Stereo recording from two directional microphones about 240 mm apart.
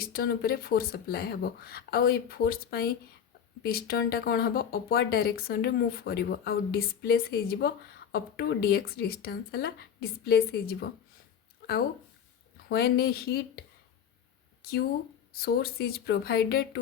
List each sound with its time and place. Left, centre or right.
0.0 s speech: left
12.6 s speech: left
15.4 s speech: left